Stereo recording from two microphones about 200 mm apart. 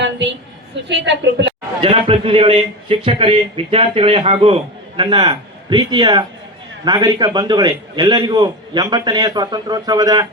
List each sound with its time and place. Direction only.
0.0 s a woman's voice: 60° right (ahead or behind)
1.8 s a man's voice: 25° right (ahead or behind)